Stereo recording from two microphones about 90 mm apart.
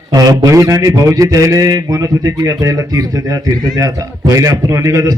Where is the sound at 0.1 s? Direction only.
45° right (ahead or behind).